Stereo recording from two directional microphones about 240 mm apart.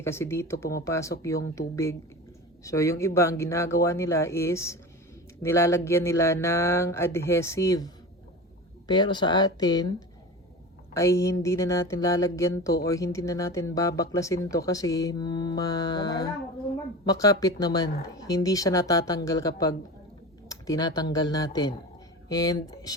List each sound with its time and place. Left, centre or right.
0.0 s speech: centre
10.9 s speech: centre